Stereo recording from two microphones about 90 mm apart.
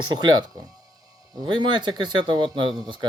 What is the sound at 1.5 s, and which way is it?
Speech, 60° right (ahead or behind).